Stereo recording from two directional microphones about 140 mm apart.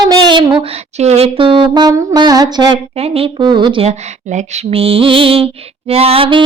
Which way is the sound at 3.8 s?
50° right (ahead or behind).